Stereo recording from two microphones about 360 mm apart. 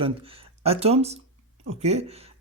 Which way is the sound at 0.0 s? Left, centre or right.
Centre.